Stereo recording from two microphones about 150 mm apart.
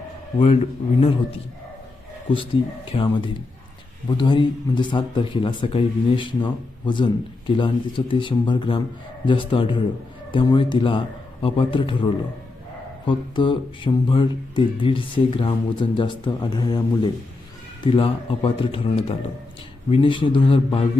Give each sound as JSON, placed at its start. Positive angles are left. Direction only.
{"t": 0.3, "sound": "a man's voice", "side_deg": 40}